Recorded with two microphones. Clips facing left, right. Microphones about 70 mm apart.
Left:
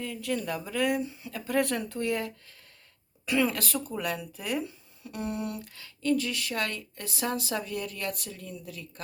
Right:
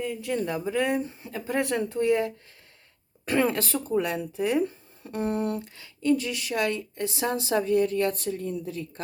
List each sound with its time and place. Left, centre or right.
0.0 s speech: right
3.2 s speech: right
5.8 s speech: right